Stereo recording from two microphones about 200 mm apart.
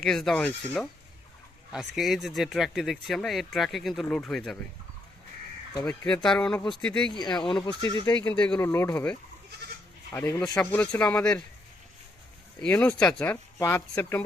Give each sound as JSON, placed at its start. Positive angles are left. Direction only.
{"t": 0.0, "sound": "speech", "side_deg": 0}
{"t": 2.0, "sound": "speech", "side_deg": 0}
{"t": 5.8, "sound": "speech", "side_deg": 10}
{"t": 7.1, "sound": "speech", "side_deg": 20}
{"t": 8.1, "sound": "speech", "side_deg": 10}
{"t": 12.5, "sound": "speech", "side_deg": 5}